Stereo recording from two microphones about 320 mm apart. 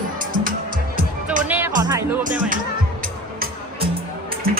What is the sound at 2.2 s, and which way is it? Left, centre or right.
Music, right.